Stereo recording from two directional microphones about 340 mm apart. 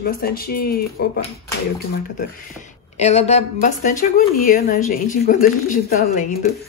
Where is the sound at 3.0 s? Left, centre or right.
Centre.